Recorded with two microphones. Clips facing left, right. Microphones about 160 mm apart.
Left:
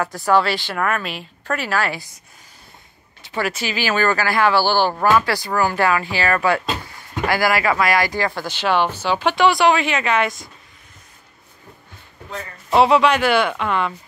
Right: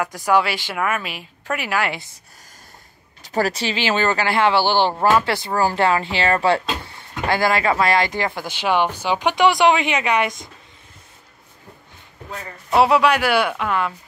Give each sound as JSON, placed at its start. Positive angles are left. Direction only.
{"t": 0.0, "sound": "speech", "side_deg": -15}
{"t": 3.2, "sound": "speech", "side_deg": -40}
{"t": 12.7, "sound": "speech", "side_deg": -5}